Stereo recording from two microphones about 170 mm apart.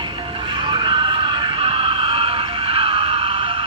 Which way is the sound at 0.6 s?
30° right (ahead or behind).